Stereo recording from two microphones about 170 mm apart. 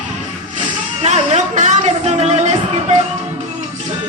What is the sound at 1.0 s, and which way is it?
Music, 40° right (ahead or behind).